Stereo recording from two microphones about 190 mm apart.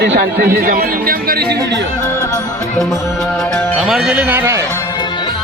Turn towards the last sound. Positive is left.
turn(degrees=-10)  # may be behind; listen again after turning